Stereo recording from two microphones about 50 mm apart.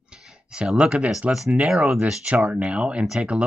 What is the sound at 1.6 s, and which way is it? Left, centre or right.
Speech, centre.